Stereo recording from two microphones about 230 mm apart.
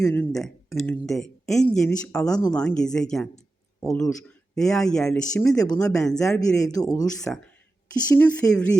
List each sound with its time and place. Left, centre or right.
0.0 s speech: centre
6.0 s speech: centre
6.6 s speech: centre
7.3 s speech: centre